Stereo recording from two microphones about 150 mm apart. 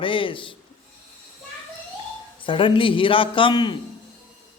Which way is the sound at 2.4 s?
35° left (ahead or behind).